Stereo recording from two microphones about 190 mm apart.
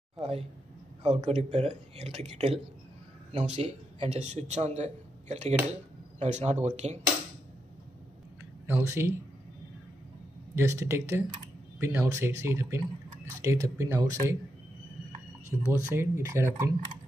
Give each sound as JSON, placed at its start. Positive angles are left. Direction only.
{"t": 0.2, "sound": "a man's voice", "side_deg": -30}
{"t": 8.6, "sound": "speech", "side_deg": -15}
{"t": 10.5, "sound": "speech", "side_deg": -15}
{"t": 15.6, "sound": "speech", "side_deg": -15}